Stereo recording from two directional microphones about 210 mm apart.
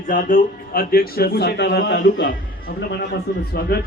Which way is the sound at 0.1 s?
40° left (ahead or behind).